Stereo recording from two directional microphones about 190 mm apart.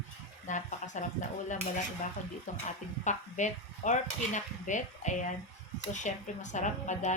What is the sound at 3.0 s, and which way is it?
A woman's voice, 40° left (ahead or behind).